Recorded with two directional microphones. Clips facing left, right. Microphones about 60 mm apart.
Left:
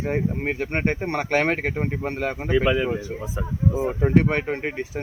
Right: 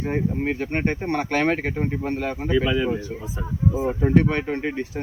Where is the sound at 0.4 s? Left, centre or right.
Left.